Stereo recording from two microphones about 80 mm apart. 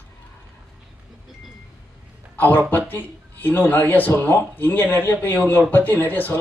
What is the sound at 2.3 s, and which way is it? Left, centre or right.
Speech, left.